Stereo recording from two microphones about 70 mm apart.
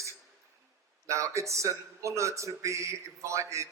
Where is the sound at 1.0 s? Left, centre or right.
Right.